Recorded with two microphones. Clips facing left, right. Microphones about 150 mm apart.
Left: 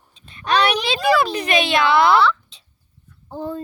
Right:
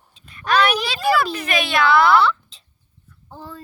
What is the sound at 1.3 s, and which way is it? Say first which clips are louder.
Speech: left 3 dB; 30° left (ahead or behind).